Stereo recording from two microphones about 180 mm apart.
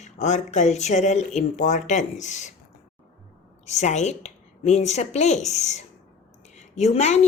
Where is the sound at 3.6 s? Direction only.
40° left (ahead or behind).